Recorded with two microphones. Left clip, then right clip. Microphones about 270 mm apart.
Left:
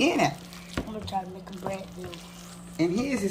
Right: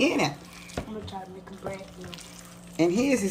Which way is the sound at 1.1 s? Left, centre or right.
Left.